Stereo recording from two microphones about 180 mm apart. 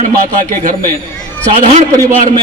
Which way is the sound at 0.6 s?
50° right (ahead or behind).